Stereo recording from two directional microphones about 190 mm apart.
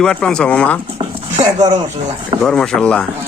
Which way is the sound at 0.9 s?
35° right (ahead or behind).